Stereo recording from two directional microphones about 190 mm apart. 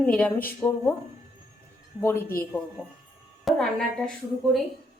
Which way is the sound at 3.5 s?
Centre (ahead or behind).